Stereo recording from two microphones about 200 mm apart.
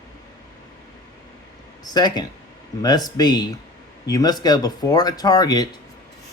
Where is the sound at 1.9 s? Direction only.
20° left (ahead or behind).